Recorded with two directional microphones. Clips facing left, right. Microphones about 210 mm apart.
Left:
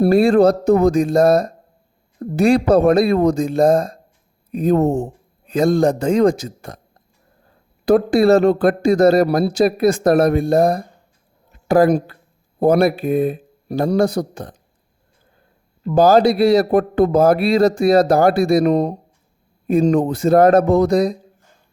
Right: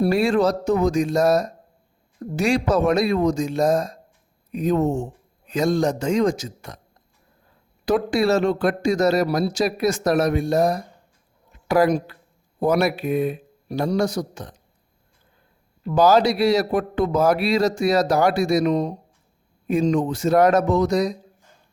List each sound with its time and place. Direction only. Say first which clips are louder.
0.0 s speech: left 6 dB; 55° left (ahead or behind)
7.9 s speech: left 7 dB; 55° left (ahead or behind)
16.0 s speech: left 4 dB; 50° left (ahead or behind)